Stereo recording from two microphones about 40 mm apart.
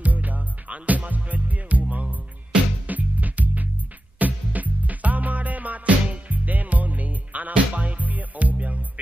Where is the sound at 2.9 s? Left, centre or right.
Right.